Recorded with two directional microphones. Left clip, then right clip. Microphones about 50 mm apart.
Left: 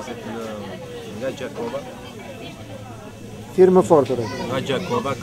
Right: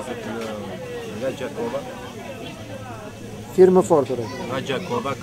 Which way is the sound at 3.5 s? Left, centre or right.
Left.